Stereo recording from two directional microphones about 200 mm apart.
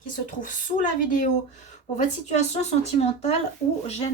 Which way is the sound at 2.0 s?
35° left (ahead or behind).